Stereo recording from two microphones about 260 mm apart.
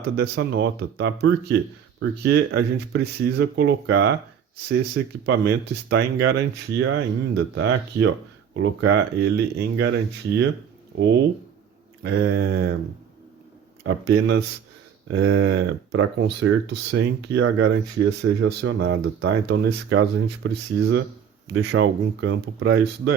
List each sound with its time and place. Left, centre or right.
0.2 s speech: right
12.0 s speech: right
13.8 s speech: right
15.0 s speech: right